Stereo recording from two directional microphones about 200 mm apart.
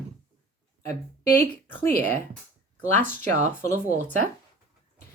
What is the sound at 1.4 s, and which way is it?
Speech, 10° left (ahead or behind).